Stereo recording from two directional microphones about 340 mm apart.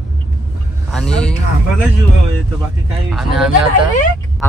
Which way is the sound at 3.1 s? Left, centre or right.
Centre.